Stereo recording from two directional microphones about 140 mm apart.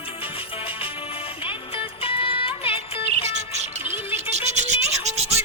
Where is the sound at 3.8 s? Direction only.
15° right (ahead or behind).